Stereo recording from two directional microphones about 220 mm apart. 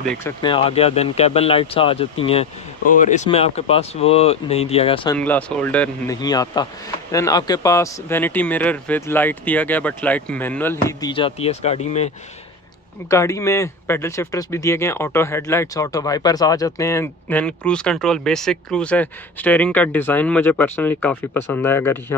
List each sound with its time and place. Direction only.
0.4 s speech: 25° left (ahead or behind)
5.1 s speech: 5° left (ahead or behind)
6.2 s speech: 15° left (ahead or behind)
13.1 s speech: 15° left (ahead or behind)